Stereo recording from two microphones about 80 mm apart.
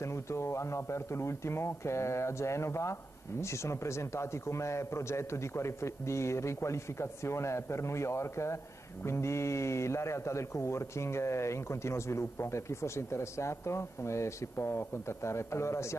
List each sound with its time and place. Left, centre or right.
0.0 s speech: left